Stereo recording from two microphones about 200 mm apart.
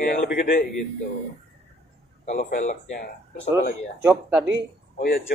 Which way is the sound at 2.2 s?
35° left (ahead or behind).